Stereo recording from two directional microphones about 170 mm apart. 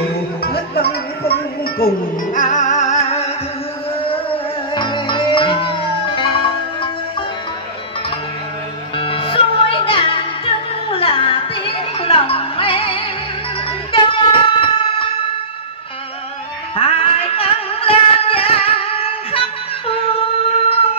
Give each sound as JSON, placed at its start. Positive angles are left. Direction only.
{"t": 0.4, "sound": "music", "side_deg": 65}
{"t": 2.3, "sound": "music", "side_deg": 50}
{"t": 8.9, "sound": "music", "side_deg": 30}
{"t": 16.7, "sound": "music", "side_deg": 35}